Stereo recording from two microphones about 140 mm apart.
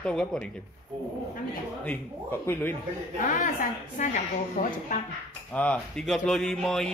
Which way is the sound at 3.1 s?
75° left (ahead or behind).